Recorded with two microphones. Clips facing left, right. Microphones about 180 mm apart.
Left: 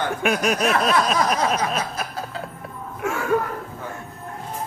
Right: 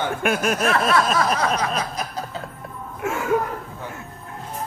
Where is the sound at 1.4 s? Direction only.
10° left (ahead or behind).